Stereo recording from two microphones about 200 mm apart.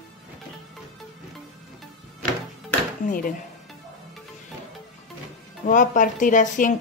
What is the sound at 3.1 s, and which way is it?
Speech, 45° left (ahead or behind).